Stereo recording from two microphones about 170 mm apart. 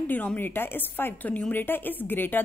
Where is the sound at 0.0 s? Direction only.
10° left (ahead or behind).